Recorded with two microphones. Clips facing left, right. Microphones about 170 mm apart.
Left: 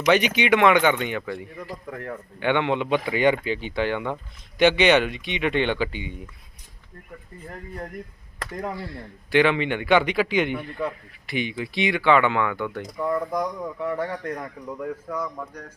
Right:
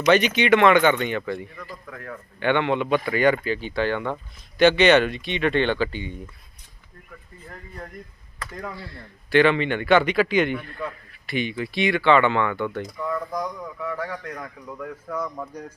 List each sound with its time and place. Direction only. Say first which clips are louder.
0.3 s speech: right 2 dB; 15° left (ahead or behind)
1.9 s a man's voice: left 5 dB; 30° left (ahead or behind)
2.4 s speech: right 1 dB; 15° left (ahead or behind)
8.7 s speech: left 5 dB; 15° left (ahead or behind)
13.0 s speech: left 4 dB; 25° left (ahead or behind)
14.7 s speech: left 4 dB; 5° left (ahead or behind)